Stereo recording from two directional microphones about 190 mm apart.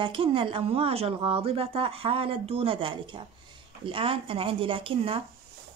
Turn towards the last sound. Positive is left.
turn(degrees=-30)  # may be behind; listen again after turning